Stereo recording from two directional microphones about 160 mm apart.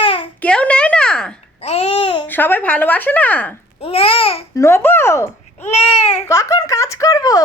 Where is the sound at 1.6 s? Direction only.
40° left (ahead or behind).